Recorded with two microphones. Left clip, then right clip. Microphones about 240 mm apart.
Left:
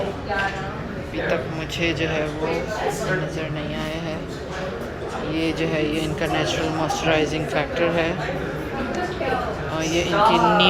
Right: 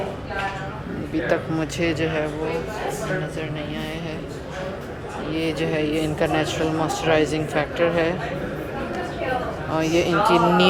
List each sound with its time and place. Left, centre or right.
1.9 s a man's voice: centre
5.3 s a man's voice: centre
9.7 s speech: centre